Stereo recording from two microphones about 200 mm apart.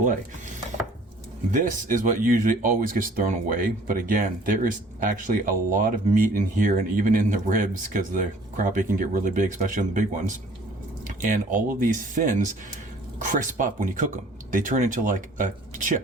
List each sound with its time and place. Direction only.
1.5 s speech: 40° right (ahead or behind)